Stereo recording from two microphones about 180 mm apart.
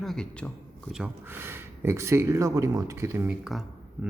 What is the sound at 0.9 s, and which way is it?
Speech, 10° right (ahead or behind).